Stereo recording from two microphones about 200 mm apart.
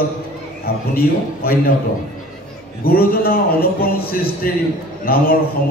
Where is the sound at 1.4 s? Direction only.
45° left (ahead or behind).